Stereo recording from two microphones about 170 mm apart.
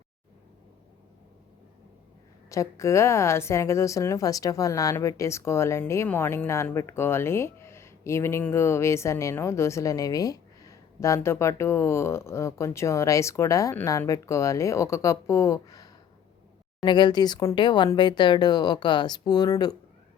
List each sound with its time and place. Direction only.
2.5 s a woman's voice: 20° left (ahead or behind)